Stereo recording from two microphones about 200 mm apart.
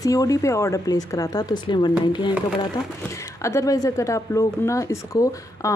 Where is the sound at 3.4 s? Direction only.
15° left (ahead or behind).